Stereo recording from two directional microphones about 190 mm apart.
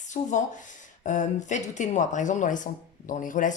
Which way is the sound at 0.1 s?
40° left (ahead or behind).